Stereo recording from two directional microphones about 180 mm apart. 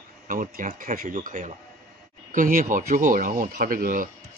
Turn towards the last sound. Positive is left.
turn(degrees=-50)  # may be behind; listen again after turning